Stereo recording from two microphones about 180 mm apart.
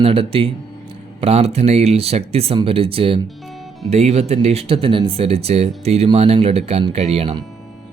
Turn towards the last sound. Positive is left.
turn(degrees=-30)  # may be behind; listen again after turning